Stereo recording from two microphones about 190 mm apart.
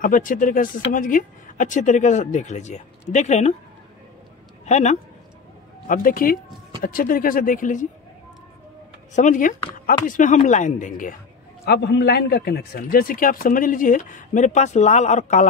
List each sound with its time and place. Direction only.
0.0 s speech: 45° left (ahead or behind)
4.6 s speech: 35° left (ahead or behind)
5.9 s a man's voice: 45° left (ahead or behind)
9.1 s a man's voice: 40° left (ahead or behind)
11.6 s a man's voice: 60° left (ahead or behind); by 15.4 s 40° left (ahead or behind)